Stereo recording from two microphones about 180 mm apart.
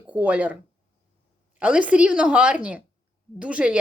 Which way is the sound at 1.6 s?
5° right (ahead or behind).